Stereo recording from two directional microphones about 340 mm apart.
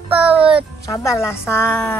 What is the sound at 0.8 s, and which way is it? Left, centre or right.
A woman's voice, centre.